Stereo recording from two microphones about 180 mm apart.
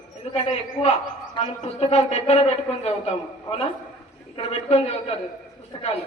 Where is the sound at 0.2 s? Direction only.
35° left (ahead or behind).